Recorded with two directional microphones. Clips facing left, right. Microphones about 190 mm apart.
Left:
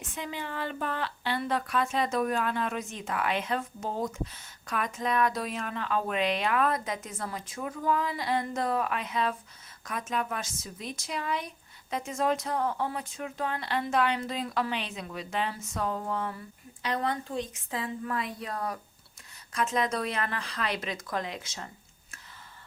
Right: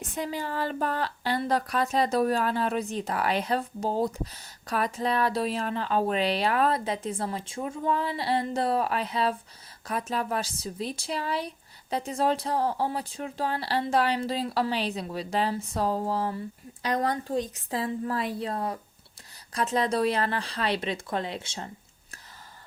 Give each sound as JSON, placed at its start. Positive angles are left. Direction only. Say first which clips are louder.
{"t": 0.0, "sound": "a woman's voice", "louder": "right 5 dB", "side_deg": -35}